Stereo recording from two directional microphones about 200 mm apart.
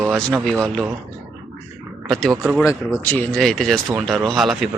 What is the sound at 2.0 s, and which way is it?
Speech, centre (ahead or behind).